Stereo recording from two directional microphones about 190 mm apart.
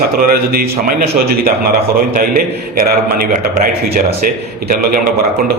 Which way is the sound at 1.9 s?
50° right (ahead or behind).